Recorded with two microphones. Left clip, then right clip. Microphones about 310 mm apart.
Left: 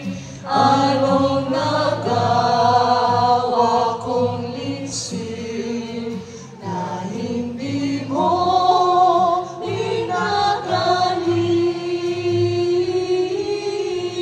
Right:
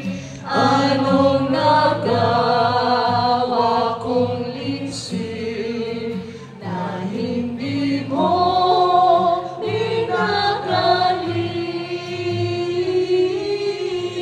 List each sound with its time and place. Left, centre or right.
0.5 s mantra: centre
1.5 s music: centre
7.7 s choir: centre
11.9 s music: centre